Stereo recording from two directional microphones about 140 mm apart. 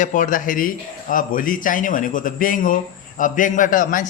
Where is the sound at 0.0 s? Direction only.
65° left (ahead or behind).